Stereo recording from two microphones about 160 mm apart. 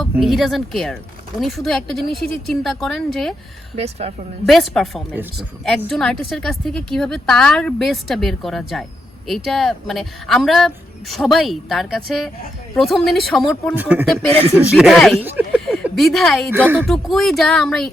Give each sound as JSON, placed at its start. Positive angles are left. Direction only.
{"t": 0.2, "sound": "a woman's voice", "side_deg": 0}
{"t": 3.8, "sound": "speech", "side_deg": -40}
{"t": 4.4, "sound": "a woman's voice", "side_deg": 0}
{"t": 13.7, "sound": "a woman's voice", "side_deg": -10}
{"t": 15.2, "sound": "speech", "side_deg": -10}
{"t": 15.6, "sound": "a woman's voice", "side_deg": 0}